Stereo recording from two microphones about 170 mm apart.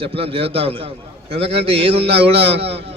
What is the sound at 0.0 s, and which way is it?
A man's voice, 35° right (ahead or behind).